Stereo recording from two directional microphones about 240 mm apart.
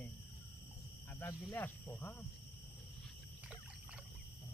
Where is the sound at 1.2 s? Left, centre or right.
Centre.